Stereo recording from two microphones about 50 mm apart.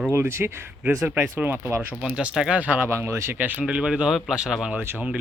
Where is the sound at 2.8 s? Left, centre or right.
Right.